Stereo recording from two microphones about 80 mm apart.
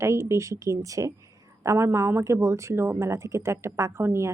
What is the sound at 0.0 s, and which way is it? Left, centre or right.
A woman's voice, right.